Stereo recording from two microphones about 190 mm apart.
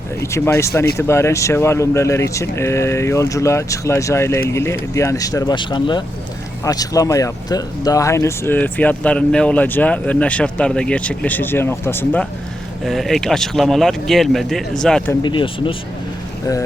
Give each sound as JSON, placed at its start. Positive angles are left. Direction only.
{"t": 0.2, "sound": "speech", "side_deg": 15}
{"t": 12.8, "sound": "speech", "side_deg": 0}
{"t": 15.2, "sound": "speech", "side_deg": 25}